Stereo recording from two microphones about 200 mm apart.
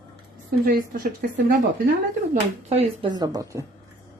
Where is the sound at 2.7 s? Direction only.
30° right (ahead or behind).